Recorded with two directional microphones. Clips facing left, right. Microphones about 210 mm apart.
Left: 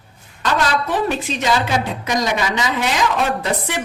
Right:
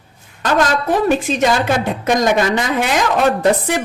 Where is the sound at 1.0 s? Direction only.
55° right (ahead or behind).